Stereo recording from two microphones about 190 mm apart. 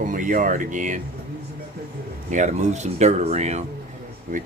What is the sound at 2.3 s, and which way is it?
Speech, 40° right (ahead or behind).